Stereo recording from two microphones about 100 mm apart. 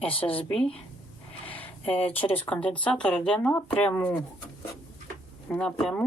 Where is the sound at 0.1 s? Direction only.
65° left (ahead or behind).